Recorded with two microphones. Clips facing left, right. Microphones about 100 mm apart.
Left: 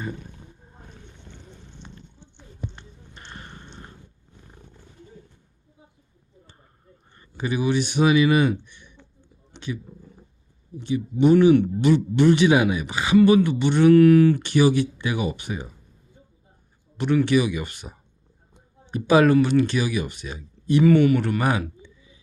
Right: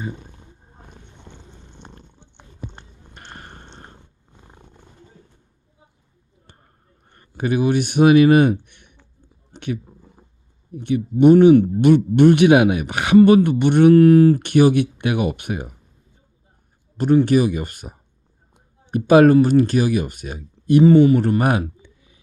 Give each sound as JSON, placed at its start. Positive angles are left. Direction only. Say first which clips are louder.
{"t": 0.0, "sound": "speech", "louder": "right 2 dB", "side_deg": -25}
{"t": 1.8, "sound": "a sound", "louder": "right 1 dB", "side_deg": -50}
{"t": 3.8, "sound": "purr", "louder": "even", "side_deg": -40}
{"t": 7.1, "sound": "speech", "louder": "right 6 dB", "side_deg": -55}
{"t": 9.5, "sound": "a sound", "louder": "right 4 dB", "side_deg": -40}
{"t": 10.8, "sound": "speech", "louder": "right 5 dB", "side_deg": -60}
{"t": 13.2, "sound": "speech", "louder": "right 4 dB", "side_deg": -55}
{"t": 13.9, "sound": "speech", "louder": "right 1 dB", "side_deg": -35}
{"t": 14.4, "sound": "speech", "louder": "right 4 dB", "side_deg": -55}
{"t": 17.2, "sound": "speech", "louder": "right 4 dB", "side_deg": -45}
{"t": 20.8, "sound": "speech", "louder": "right 4 dB", "side_deg": -30}
{"t": 21.8, "sound": "a sound", "louder": "left 2 dB", "side_deg": -55}